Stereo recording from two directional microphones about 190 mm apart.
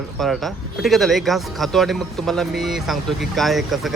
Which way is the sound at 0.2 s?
Centre (ahead or behind).